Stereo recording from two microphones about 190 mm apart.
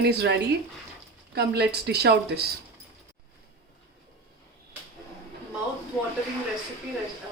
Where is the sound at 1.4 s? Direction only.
60° right (ahead or behind).